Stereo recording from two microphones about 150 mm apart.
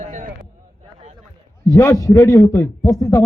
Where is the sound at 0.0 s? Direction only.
60° right (ahead or behind).